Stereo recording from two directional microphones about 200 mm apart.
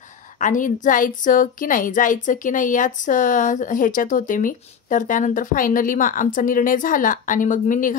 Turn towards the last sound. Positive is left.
turn(degrees=40)  # may be behind; listen again after turning